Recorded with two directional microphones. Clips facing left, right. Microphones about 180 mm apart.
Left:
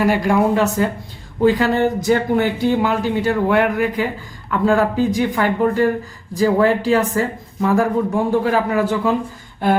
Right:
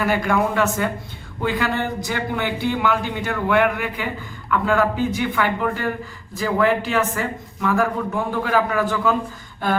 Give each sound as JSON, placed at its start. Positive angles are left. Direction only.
{"t": 0.0, "sound": "speech", "side_deg": 30}